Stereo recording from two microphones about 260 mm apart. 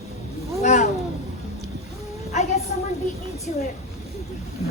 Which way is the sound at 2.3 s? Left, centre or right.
Left.